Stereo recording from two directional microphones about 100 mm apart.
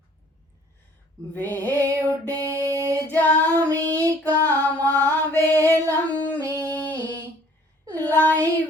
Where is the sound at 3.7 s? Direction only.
30° right (ahead or behind).